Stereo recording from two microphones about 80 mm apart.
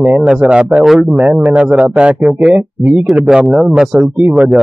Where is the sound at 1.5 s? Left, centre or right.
Centre.